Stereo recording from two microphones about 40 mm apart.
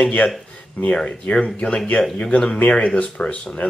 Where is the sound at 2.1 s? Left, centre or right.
Left.